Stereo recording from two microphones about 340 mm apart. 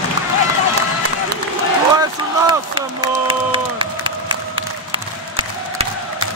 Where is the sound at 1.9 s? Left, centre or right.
Centre.